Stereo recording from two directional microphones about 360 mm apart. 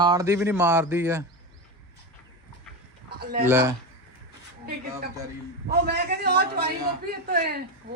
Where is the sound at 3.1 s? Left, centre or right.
Right.